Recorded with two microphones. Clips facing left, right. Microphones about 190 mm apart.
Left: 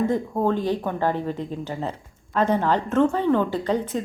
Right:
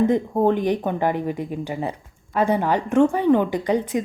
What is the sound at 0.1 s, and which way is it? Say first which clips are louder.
A woman's voice: right 4 dB; 20° right (ahead or behind).